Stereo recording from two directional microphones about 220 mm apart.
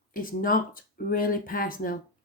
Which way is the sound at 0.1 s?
40° left (ahead or behind).